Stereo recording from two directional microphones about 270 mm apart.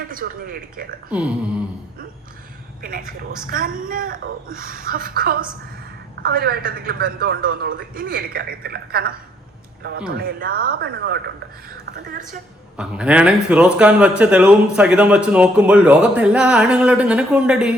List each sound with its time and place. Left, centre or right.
0.1 s a man's voice: right
3.1 s a man's voice: right
12.7 s speech: centre